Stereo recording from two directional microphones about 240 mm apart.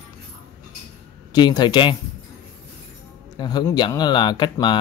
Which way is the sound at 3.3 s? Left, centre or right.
Centre.